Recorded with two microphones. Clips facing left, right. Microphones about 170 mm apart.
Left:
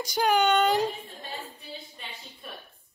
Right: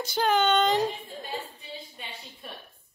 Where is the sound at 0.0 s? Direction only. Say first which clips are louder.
Left 1 dB; 10° left (ahead or behind).